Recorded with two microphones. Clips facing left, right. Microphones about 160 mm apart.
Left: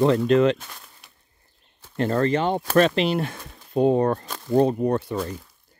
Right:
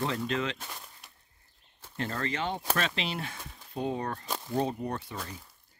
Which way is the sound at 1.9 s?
50° left (ahead or behind).